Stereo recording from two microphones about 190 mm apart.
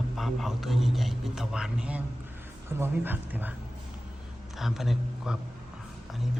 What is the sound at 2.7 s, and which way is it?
Speech, 10° right (ahead or behind).